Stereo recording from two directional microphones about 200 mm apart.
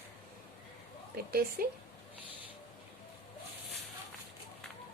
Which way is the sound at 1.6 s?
45° right (ahead or behind).